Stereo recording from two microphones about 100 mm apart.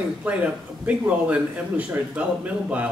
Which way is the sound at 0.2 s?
15° right (ahead or behind).